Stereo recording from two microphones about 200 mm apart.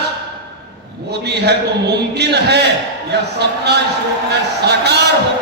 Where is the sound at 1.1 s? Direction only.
55° right (ahead or behind).